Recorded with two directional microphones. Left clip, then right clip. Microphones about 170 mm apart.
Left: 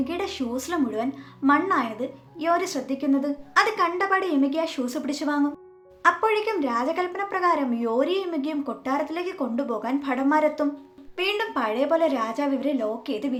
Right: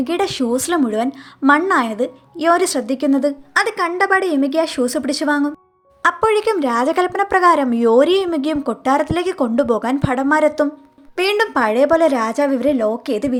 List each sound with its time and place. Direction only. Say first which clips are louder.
0.0 s speech: right 9 dB; 50° right (ahead or behind)